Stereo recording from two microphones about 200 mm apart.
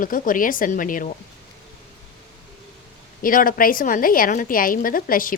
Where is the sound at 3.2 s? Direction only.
45° left (ahead or behind).